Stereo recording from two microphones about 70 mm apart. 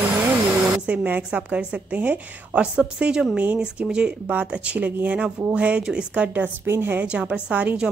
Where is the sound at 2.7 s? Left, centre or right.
Centre.